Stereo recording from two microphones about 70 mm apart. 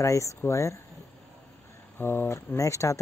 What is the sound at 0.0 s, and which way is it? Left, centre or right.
Speech, left.